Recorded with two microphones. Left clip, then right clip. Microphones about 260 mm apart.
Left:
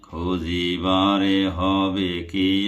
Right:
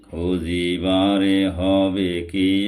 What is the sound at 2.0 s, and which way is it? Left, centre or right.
Mantra, left.